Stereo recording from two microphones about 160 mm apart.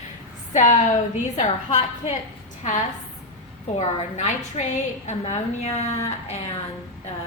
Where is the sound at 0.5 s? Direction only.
50° left (ahead or behind).